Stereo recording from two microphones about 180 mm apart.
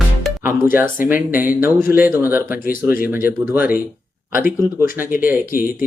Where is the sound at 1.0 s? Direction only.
50° left (ahead or behind).